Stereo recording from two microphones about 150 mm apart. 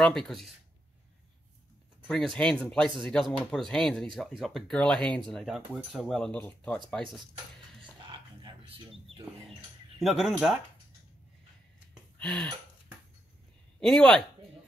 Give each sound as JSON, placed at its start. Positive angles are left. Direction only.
{"t": 0.0, "sound": "speech", "side_deg": 5}
{"t": 2.0, "sound": "speech", "side_deg": 5}
{"t": 8.1, "sound": "wild animals", "side_deg": -30}
{"t": 9.9, "sound": "speech", "side_deg": 0}
{"t": 12.2, "sound": "a sound", "side_deg": 5}
{"t": 13.7, "sound": "speech", "side_deg": 5}